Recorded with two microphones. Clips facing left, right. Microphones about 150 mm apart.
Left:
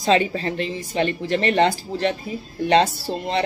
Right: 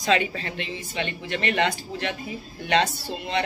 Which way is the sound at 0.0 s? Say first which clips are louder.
Left 5 dB; 30° left (ahead or behind).